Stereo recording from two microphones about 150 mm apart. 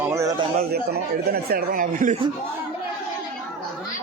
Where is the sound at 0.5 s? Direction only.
90° right; by 2.2 s 65° right (ahead or behind).